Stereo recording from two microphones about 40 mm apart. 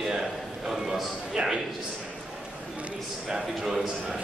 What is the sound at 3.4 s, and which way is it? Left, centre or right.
Speech, centre.